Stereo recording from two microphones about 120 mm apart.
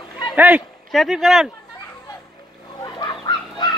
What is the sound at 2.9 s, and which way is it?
Fowl, 35° left (ahead or behind).